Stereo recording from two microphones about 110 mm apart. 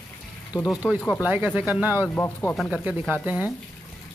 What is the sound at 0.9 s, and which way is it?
Speech, 15° left (ahead or behind).